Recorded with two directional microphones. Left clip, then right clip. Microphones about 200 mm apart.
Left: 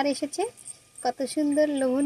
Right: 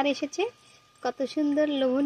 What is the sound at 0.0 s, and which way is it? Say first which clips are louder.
Speech: even; 15° right (ahead or behind).